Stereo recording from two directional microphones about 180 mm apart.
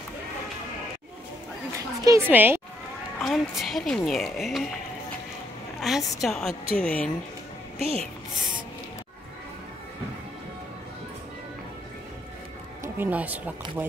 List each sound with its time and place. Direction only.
2.0 s speech: 10° right (ahead or behind)
3.2 s speech: centre (ahead or behind)
5.8 s speech: centre (ahead or behind)
7.8 s speech: 35° right (ahead or behind)
12.8 s speech: 10° right (ahead or behind)